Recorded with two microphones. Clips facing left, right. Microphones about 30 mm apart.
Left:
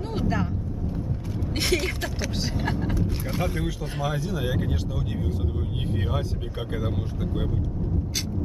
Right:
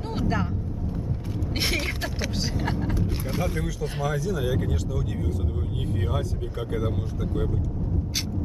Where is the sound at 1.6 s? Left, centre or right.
Centre.